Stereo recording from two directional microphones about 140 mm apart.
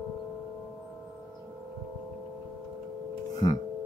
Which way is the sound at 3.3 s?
25° left (ahead or behind).